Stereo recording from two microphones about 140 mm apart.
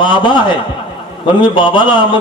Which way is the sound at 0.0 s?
35° left (ahead or behind).